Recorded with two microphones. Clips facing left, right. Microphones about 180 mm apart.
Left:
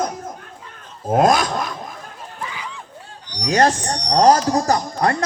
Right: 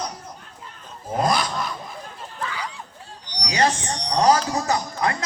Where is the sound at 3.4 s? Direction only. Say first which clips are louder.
Left 5 dB; 50° left (ahead or behind).